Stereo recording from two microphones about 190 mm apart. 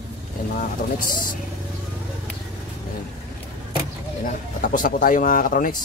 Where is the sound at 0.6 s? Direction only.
45° left (ahead or behind).